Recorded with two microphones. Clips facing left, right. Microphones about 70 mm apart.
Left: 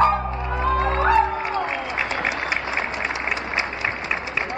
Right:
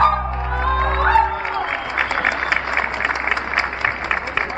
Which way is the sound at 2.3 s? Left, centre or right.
Right.